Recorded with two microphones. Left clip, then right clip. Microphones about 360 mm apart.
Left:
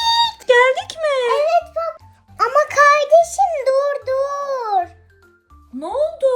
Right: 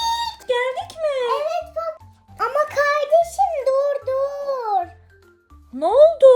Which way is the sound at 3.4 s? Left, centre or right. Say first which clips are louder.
Left 2 dB; left.